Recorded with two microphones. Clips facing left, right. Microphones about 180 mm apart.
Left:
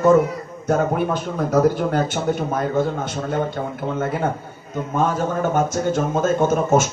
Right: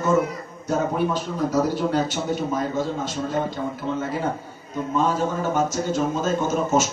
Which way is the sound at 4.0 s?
55° left (ahead or behind).